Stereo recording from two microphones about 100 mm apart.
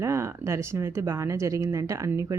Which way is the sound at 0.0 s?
25° right (ahead or behind).